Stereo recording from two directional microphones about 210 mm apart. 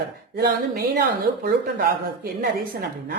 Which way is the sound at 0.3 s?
50° right (ahead or behind).